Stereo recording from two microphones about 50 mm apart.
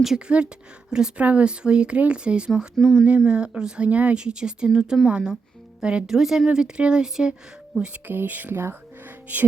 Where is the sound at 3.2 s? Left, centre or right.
Right.